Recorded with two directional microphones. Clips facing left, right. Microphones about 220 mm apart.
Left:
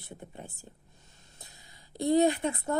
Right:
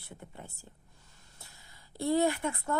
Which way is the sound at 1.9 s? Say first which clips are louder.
Left 4 dB; 20° left (ahead or behind).